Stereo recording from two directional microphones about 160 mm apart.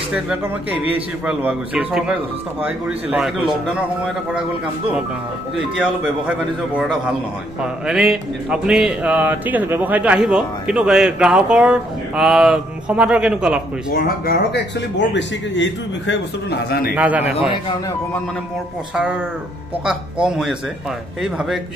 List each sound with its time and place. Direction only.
0.1 s a man's voice: 5° right (ahead or behind)
6.2 s a sound: 5° right (ahead or behind)
13.9 s speech: 70° left (ahead or behind); by 15.2 s 90° left
16.4 s a man's voice: 70° left (ahead or behind)
16.9 s a man's voice: 10° right (ahead or behind)
19.8 s a sound: 5° right (ahead or behind)